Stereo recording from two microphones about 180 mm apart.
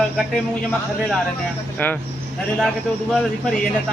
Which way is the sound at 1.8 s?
10° left (ahead or behind).